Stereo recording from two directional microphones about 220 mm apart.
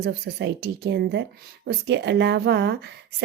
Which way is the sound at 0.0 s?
50° right (ahead or behind).